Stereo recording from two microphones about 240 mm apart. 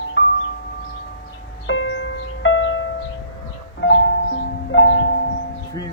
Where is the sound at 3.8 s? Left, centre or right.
Left.